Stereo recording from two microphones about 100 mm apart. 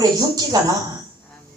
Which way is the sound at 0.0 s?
40° right (ahead or behind).